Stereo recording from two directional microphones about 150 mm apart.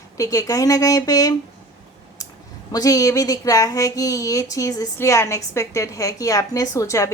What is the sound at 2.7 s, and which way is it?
Speech, 25° left (ahead or behind).